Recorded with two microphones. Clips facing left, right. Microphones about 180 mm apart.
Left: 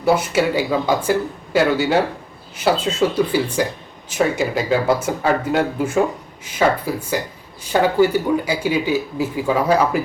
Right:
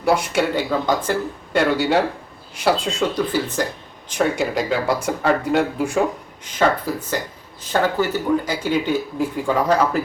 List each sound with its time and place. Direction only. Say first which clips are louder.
0.0 s speech: left 2 dB; centre (ahead or behind)